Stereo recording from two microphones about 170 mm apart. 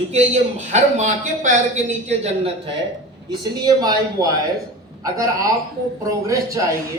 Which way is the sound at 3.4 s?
25° right (ahead or behind).